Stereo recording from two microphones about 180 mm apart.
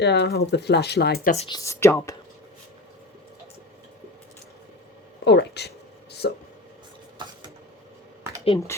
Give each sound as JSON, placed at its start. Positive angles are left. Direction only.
{"t": 0.0, "sound": "speech", "side_deg": 70}
{"t": 1.5, "sound": "speech", "side_deg": 20}
{"t": 5.2, "sound": "a sound", "side_deg": 75}